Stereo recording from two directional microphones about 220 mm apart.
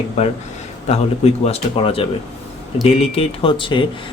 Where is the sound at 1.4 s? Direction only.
25° left (ahead or behind).